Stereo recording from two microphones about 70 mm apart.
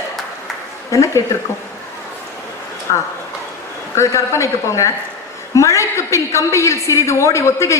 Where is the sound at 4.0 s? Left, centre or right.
Left.